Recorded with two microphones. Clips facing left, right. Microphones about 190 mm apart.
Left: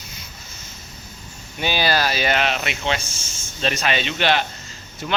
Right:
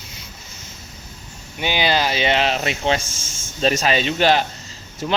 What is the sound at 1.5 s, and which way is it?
Speech, 15° right (ahead or behind).